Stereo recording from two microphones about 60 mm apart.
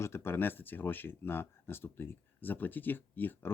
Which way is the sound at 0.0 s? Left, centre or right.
Left.